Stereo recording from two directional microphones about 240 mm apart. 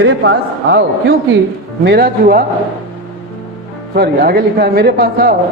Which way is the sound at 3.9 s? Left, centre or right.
Right.